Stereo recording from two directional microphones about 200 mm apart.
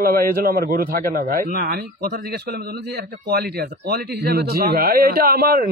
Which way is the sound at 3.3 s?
55° right (ahead or behind).